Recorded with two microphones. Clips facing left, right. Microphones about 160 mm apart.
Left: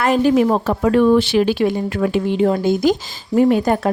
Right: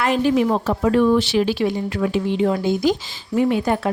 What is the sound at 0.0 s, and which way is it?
A woman's voice, 45° left (ahead or behind).